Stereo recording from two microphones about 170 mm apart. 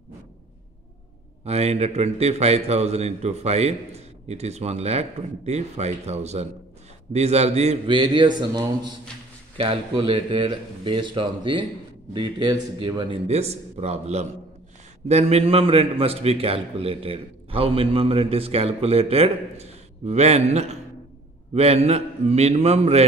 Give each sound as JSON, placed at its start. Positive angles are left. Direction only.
{"t": 1.4, "sound": "a man's voice", "side_deg": -40}
{"t": 13.3, "sound": "a man's voice", "side_deg": -40}